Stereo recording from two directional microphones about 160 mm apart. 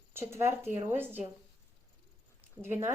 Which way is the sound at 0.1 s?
15° right (ahead or behind).